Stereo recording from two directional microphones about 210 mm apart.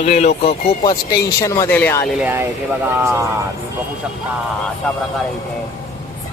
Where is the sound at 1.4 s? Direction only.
15° left (ahead or behind).